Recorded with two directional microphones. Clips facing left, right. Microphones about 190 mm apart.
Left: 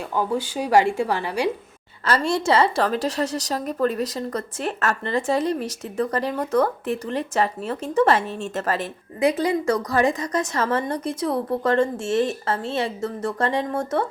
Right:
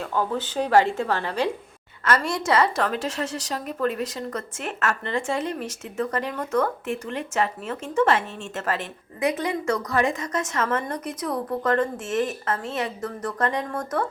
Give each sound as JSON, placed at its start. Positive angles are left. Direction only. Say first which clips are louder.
{"t": 0.0, "sound": "a woman's voice", "louder": "left 2 dB", "side_deg": 15}
{"t": 2.0, "sound": "a woman's voice", "louder": "left 2 dB", "side_deg": 30}